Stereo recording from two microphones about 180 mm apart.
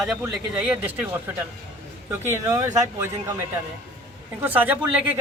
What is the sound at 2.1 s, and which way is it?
A woman's voice, 20° right (ahead or behind).